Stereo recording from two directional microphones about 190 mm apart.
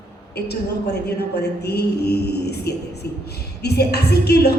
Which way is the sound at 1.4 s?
60° left (ahead or behind).